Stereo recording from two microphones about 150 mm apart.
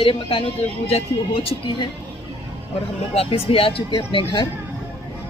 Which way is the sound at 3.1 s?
40° left (ahead or behind).